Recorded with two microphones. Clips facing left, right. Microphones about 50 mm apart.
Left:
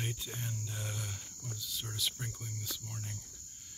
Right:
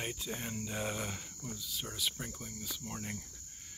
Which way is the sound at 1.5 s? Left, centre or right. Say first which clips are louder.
Right 1 dB; centre.